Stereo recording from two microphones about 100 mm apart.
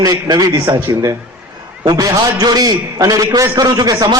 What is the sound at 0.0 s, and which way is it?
Speech, 40° right (ahead or behind).